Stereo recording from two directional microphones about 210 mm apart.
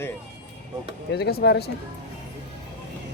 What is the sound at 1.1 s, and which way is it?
Speech, 50° left (ahead or behind).